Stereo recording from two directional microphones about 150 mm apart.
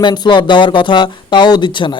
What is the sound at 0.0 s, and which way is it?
Speech, 30° left (ahead or behind).